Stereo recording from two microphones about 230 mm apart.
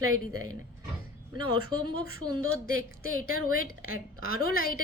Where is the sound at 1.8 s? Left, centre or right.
Left.